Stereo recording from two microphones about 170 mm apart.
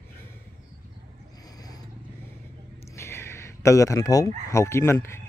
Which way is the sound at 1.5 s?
20° left (ahead or behind).